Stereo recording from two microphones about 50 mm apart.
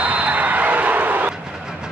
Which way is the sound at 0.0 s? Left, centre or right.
Right.